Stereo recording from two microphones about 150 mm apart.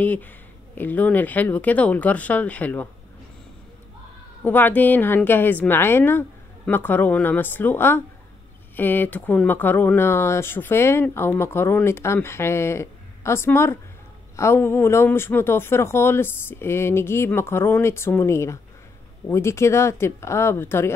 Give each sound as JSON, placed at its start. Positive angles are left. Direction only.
{"t": 0.0, "sound": "speech", "side_deg": 10}
{"t": 4.5, "sound": "speech", "side_deg": 10}